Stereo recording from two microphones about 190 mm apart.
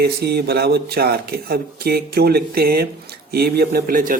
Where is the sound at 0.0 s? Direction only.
60° right (ahead or behind).